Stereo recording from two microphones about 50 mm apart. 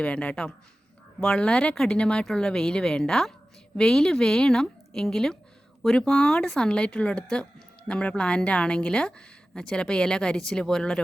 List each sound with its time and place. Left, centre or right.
0.0 s a woman's voice: left